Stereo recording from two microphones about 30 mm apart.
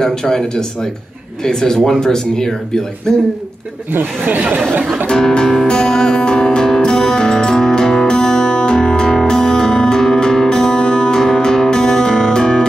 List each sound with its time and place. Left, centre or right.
0.0 s speech: left
3.9 s speech: right
5.1 s speech: left
6.1 s music: left